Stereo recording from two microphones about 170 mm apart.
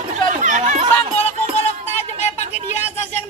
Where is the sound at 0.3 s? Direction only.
50° right (ahead or behind).